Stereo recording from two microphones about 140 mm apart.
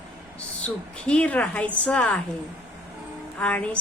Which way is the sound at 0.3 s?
10° left (ahead or behind).